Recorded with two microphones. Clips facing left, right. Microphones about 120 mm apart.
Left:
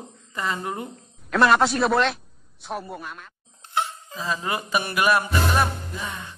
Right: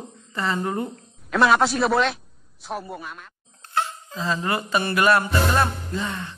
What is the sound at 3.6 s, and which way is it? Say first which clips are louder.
Music: right 1 dB; 15° left (ahead or behind).